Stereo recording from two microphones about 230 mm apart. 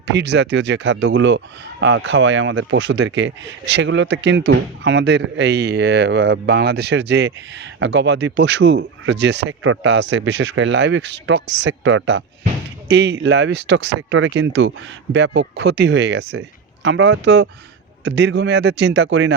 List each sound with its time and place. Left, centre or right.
0.1 s speech: right